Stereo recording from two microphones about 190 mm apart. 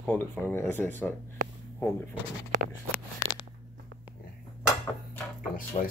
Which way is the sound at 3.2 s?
45° left (ahead or behind).